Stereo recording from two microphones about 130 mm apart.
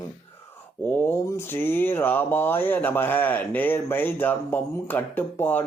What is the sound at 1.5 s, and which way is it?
Speech, 15° left (ahead or behind).